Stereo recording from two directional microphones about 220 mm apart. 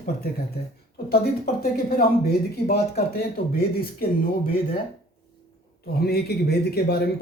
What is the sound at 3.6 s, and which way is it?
Speech, 45° left (ahead or behind).